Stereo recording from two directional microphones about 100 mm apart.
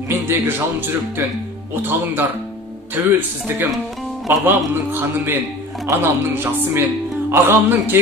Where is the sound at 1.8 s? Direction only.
20° right (ahead or behind).